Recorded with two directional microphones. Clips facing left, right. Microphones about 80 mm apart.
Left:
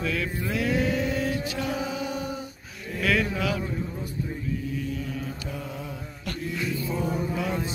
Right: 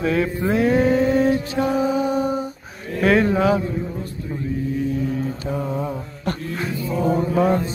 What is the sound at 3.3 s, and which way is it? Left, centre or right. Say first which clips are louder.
Speech: right 10 dB; right.